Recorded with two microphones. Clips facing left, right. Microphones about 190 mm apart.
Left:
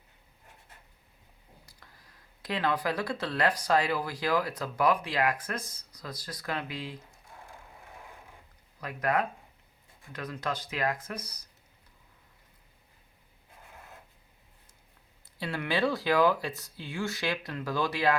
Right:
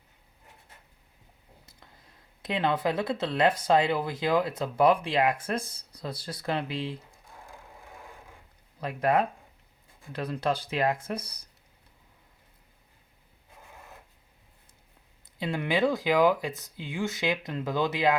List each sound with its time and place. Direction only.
1.6 s speech: 25° right (ahead or behind)
8.8 s speech: 25° right (ahead or behind)
15.2 s speech: 20° right (ahead or behind)